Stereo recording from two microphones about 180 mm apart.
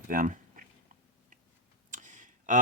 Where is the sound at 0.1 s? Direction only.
50° right (ahead or behind).